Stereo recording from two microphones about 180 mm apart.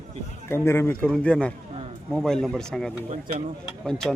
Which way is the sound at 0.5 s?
15° left (ahead or behind).